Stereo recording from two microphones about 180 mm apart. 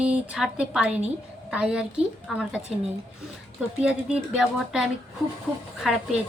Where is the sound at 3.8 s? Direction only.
5° right (ahead or behind).